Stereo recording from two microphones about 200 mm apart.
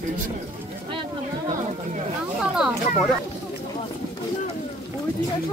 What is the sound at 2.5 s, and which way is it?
Speech, 5° right (ahead or behind).